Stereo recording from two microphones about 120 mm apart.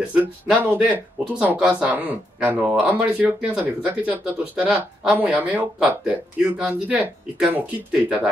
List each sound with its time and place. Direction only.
0.1 s speech: 15° right (ahead or behind)